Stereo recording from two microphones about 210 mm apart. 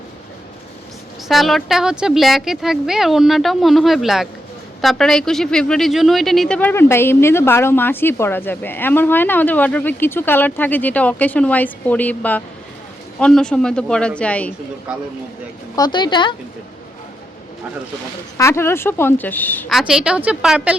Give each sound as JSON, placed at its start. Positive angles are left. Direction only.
{"t": 1.3, "sound": "speech", "side_deg": 0}
{"t": 14.9, "sound": "speech", "side_deg": -5}
{"t": 15.7, "sound": "a woman's voice", "side_deg": 20}
{"t": 18.3, "sound": "speech", "side_deg": 10}